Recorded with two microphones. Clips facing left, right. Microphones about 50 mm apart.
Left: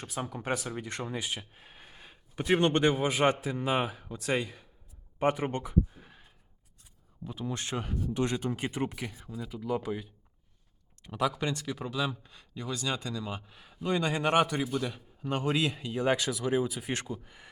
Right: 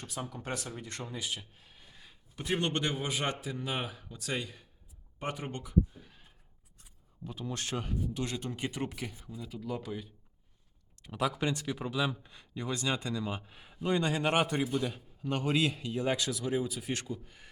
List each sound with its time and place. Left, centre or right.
0.2 s a man's voice: left
0.7 s a man's voice: left
7.3 s speech: centre
8.1 s a man's voice: left
11.0 s a man's voice: centre
13.9 s a man's voice: centre
14.9 s a man's voice: centre